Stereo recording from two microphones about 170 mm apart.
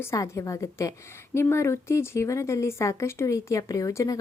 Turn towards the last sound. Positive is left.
turn(degrees=20)  # may be behind; listen again after turning